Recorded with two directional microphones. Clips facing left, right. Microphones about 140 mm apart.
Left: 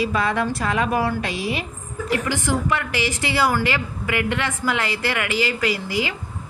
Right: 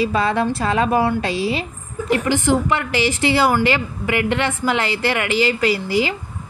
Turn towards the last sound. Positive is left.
turn(degrees=-30)  # may be behind; listen again after turning